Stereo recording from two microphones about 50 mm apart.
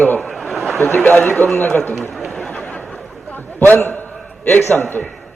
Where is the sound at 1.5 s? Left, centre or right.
Left.